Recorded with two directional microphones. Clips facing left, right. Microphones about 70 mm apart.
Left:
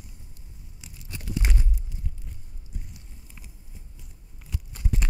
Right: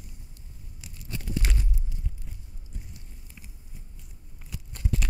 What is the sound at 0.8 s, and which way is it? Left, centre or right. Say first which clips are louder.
Tearing: right 3 dB; centre.